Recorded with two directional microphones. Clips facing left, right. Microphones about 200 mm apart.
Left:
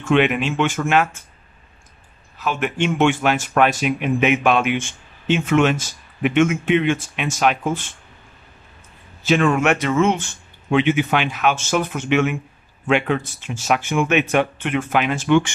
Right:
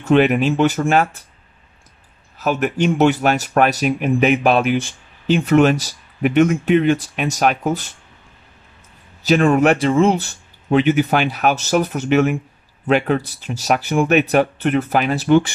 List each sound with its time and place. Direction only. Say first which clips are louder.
0.0 s speech: right 3 dB; 40° right (ahead or behind)
2.3 s speech: right 4 dB; 40° right (ahead or behind)
9.2 s speech: right 3 dB; 40° right (ahead or behind)